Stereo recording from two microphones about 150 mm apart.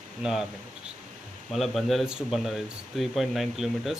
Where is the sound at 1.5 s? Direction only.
Centre (ahead or behind).